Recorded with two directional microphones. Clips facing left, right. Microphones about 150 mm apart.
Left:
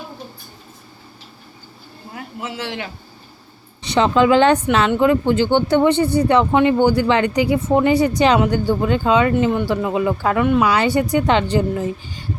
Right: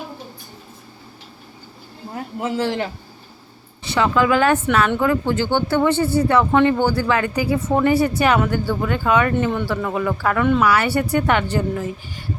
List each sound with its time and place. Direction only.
2.1 s a man's voice: 40° right (ahead or behind)
3.8 s speech: 20° left (ahead or behind)
9.4 s speech: 10° left (ahead or behind)